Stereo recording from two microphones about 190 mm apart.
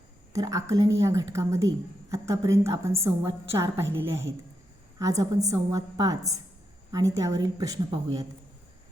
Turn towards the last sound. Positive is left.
turn(degrees=-20)  # may be behind; listen again after turning